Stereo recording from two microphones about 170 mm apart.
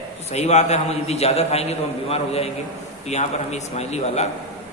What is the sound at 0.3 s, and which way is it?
A man's voice, 40° left (ahead or behind).